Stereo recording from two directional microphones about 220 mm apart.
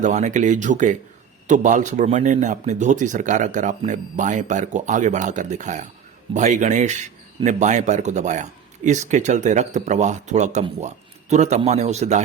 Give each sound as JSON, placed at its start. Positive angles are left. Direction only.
{"t": 0.0, "sound": "speech", "side_deg": -35}